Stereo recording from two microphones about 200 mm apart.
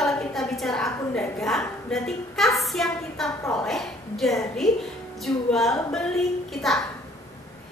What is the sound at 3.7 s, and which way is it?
A woman's voice, centre (ahead or behind).